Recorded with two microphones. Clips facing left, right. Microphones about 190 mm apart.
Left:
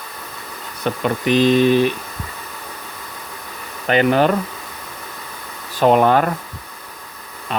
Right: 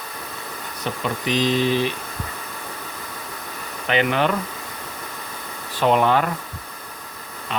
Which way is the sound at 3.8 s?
40° left (ahead or behind).